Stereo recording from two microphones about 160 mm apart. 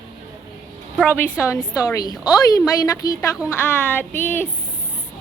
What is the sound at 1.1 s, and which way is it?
A woman's voice, 15° left (ahead or behind).